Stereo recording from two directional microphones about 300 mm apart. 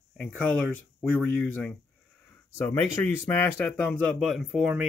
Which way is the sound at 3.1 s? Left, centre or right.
Centre.